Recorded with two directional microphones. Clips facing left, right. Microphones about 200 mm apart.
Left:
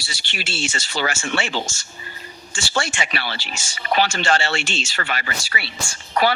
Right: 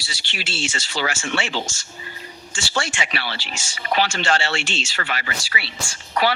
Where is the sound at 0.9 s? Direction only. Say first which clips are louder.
Left 1 dB; 45° left (ahead or behind).